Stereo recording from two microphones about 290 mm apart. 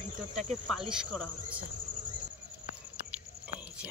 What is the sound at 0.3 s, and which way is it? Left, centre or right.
Cricket, right.